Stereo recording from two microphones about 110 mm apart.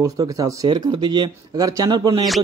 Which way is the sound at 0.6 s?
45° right (ahead or behind).